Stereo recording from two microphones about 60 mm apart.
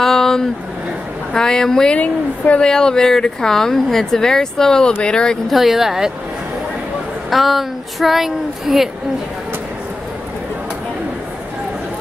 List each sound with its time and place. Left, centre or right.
0.0 s a sound: centre
1.3 s speech: centre
2.0 s a woman's voice: left
2.6 s speech: centre
5.5 s speech: centre
7.2 s speech: centre